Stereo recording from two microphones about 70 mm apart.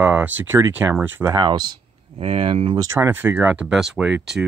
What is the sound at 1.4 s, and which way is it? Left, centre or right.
Speech, right.